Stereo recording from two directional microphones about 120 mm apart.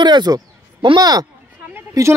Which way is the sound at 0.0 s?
35° right (ahead or behind).